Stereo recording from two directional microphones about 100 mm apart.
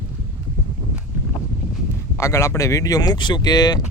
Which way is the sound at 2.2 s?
30° left (ahead or behind).